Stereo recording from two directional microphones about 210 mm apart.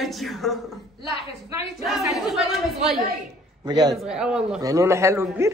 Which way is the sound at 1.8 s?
Centre (ahead or behind).